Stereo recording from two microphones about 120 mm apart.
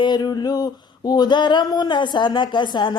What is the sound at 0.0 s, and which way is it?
Speech, 35° left (ahead or behind).